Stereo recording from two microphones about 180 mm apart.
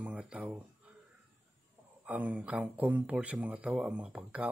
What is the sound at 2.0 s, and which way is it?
Speech, 10° right (ahead or behind).